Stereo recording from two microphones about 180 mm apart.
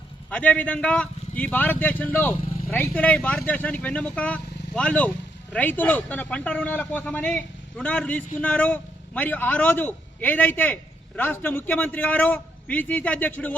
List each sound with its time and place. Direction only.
0.3 s a man's voice: 10° left (ahead or behind)